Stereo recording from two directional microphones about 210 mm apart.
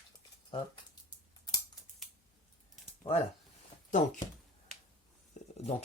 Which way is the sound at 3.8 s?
35° left (ahead or behind).